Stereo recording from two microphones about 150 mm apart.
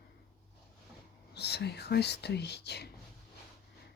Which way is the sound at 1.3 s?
90° left.